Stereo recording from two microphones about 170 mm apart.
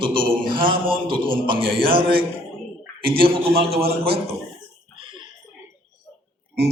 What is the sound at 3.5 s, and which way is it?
Speech, 65° right (ahead or behind).